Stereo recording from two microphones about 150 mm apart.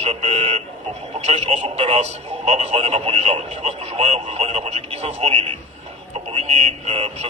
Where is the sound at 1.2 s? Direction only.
45° right (ahead or behind).